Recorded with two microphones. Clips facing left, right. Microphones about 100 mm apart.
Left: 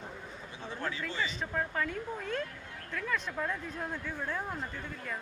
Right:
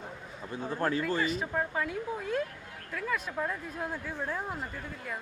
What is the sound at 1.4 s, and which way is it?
Speech, 10° right (ahead or behind).